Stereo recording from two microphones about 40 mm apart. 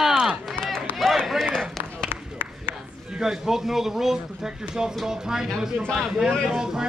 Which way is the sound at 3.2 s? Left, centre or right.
Centre.